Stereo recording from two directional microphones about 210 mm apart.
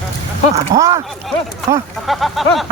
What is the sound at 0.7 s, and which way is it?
Speech, 15° right (ahead or behind).